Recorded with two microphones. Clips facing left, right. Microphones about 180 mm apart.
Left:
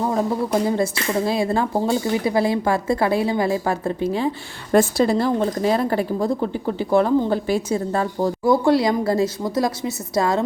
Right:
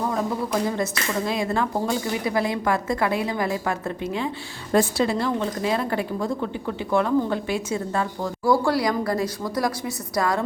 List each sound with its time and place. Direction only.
0.0 s speech: 30° left (ahead or behind)
4.7 s speech: 45° left (ahead or behind)
8.4 s a woman's voice: 20° left (ahead or behind)